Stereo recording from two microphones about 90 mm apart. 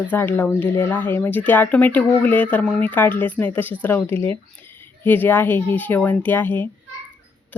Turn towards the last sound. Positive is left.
turn(degrees=20)  # may be behind; listen again after turning